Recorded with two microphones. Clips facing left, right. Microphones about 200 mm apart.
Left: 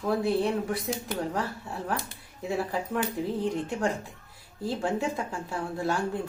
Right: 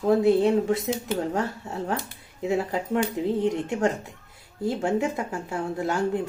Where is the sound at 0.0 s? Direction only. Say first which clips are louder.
Right 7 dB; 20° right (ahead or behind).